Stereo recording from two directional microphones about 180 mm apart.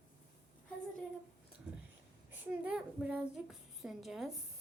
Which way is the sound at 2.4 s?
5° right (ahead or behind).